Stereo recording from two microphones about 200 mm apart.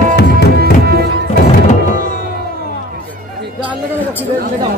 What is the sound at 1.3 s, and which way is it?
Music, 40° left (ahead or behind).